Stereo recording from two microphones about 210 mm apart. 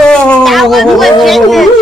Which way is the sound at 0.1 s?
Centre (ahead or behind).